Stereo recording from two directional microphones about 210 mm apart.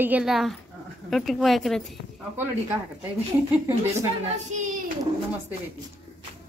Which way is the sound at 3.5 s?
10° right (ahead or behind).